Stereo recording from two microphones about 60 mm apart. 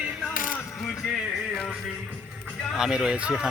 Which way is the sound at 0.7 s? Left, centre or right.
Centre.